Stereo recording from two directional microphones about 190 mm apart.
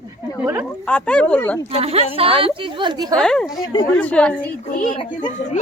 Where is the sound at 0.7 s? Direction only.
5° left (ahead or behind).